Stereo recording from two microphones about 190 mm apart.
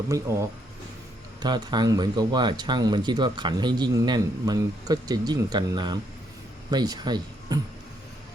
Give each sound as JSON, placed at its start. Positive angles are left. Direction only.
{"t": 0.1, "sound": "speech", "side_deg": -15}